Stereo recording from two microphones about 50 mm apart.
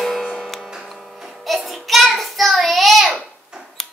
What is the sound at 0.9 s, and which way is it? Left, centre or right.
Child singing, centre.